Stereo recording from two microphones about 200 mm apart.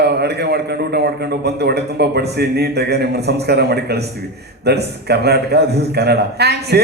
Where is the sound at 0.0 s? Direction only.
55° right (ahead or behind).